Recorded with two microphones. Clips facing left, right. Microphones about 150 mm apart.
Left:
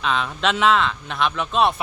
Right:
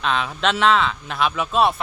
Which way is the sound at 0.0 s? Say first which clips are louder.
Right 1 dB; centre (ahead or behind).